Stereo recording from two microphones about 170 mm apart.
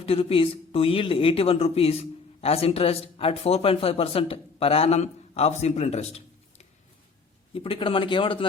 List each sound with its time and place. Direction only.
0.0 s speech: 35° left (ahead or behind)